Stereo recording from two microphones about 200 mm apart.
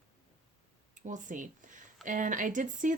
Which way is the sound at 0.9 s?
40° right (ahead or behind).